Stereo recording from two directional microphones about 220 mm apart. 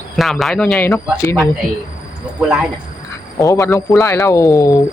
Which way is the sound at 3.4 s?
15° left (ahead or behind).